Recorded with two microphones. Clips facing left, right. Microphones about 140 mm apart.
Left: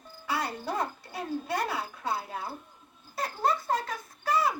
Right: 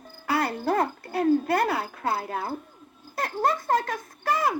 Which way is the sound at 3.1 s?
50° right (ahead or behind).